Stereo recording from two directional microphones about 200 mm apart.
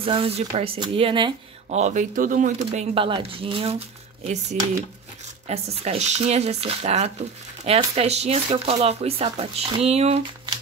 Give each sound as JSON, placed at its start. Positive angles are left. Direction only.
{"t": 0.0, "sound": "speech", "side_deg": -25}